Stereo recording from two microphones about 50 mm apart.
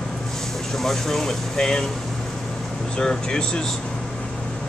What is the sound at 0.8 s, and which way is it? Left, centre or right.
Speech, centre.